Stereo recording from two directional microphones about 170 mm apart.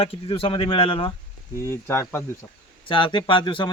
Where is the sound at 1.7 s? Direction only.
15° left (ahead or behind).